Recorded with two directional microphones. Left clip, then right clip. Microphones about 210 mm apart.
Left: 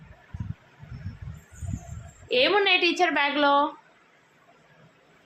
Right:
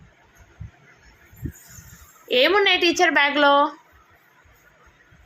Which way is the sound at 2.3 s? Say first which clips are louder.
Right 4 dB; 15° right (ahead or behind).